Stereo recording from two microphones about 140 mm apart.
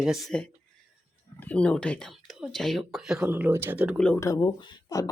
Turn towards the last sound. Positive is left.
turn(degrees=25)  # may be behind; listen again after turning